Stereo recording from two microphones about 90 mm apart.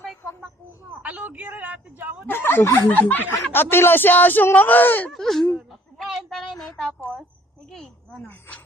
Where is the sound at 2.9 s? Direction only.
20° left (ahead or behind).